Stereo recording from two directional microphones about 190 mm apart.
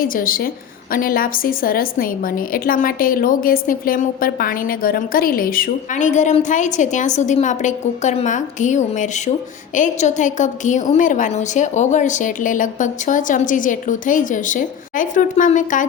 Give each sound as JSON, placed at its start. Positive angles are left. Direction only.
{"t": 0.0, "sound": "a woman's voice", "side_deg": 50}